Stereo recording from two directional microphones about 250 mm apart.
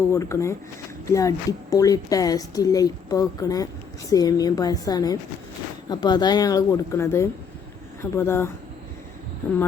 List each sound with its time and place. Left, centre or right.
0.1 s a woman's voice: centre